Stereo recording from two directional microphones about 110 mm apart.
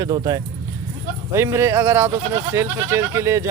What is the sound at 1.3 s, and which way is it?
Speech, 25° right (ahead or behind).